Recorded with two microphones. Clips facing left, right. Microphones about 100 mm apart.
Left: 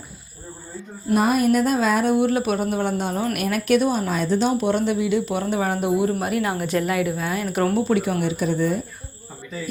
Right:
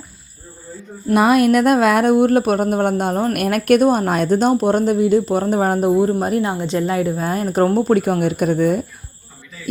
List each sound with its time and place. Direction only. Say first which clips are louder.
1.1 s a woman's voice: right 5 dB; 75° right (ahead or behind); by 6.5 s 35° right (ahead or behind)
6.5 s a woman's voice: right 3 dB; 25° right (ahead or behind); by 8.8 s 55° right (ahead or behind)